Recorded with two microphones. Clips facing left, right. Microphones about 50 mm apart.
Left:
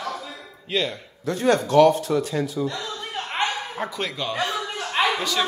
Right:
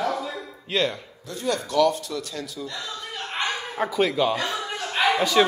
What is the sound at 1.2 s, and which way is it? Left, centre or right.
Speech, left.